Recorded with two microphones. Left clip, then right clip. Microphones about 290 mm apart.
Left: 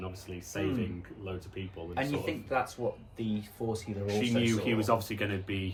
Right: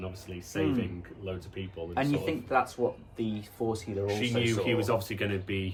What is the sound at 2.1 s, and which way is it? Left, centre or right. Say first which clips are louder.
Speech: right 5 dB; centre.